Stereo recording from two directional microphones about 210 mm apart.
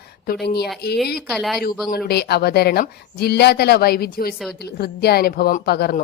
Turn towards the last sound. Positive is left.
turn(degrees=50)  # may be behind; listen again after turning